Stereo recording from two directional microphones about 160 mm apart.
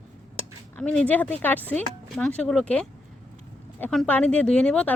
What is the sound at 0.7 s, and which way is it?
Speech, 10° left (ahead or behind).